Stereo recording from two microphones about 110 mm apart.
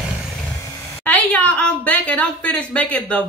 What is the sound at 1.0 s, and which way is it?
A woman's voice, 15° left (ahead or behind).